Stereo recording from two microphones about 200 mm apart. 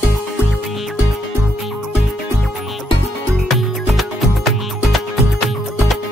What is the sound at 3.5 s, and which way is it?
Music, centre (ahead or behind).